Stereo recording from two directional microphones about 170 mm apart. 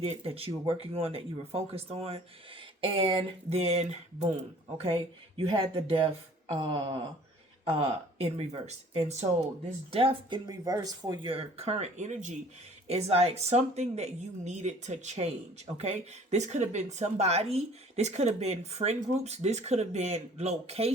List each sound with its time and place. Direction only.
0.0 s a woman's voice: 35° right (ahead or behind)
5.4 s a woman's voice: 35° right (ahead or behind)